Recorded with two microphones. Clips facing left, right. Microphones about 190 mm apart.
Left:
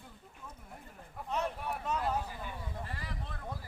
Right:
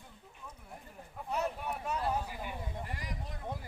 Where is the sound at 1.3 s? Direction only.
10° right (ahead or behind).